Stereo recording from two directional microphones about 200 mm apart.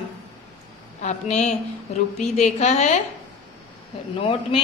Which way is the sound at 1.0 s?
35° left (ahead or behind).